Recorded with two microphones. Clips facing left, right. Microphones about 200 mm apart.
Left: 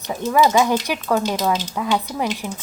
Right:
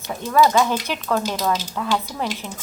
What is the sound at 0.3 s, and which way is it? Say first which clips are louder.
Frying: left 1 dB; 15° left (ahead or behind).